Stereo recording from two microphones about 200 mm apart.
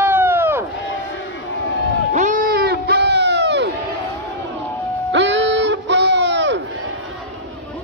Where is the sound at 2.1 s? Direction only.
40° right (ahead or behind); by 3.7 s 60° right (ahead or behind).